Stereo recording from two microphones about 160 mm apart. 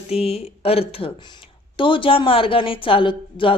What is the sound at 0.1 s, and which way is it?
A woman's voice, 40° left (ahead or behind).